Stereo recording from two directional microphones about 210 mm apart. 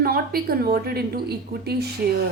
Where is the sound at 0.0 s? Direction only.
45° right (ahead or behind).